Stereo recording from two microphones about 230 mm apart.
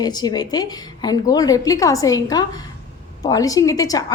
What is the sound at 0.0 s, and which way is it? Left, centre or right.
A woman's voice, centre.